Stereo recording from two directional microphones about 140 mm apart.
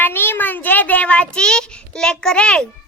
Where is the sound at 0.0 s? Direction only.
15° left (ahead or behind).